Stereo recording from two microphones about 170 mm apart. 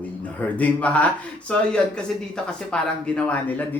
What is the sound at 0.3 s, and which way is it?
A man's voice, 10° left (ahead or behind).